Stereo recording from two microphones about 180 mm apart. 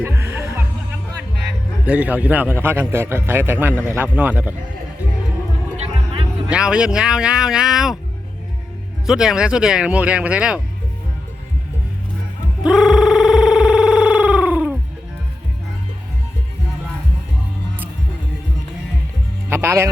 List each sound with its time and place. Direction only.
0.0 s music: 15° right (ahead or behind)
1.9 s a man's voice: 5° right (ahead or behind)
5.7 s music: 35° right (ahead or behind)
6.5 s speech: 5° right (ahead or behind)
9.0 s speech: 5° right (ahead or behind)
12.6 s a sound: 5° right (ahead or behind)
19.5 s music: 10° right (ahead or behind)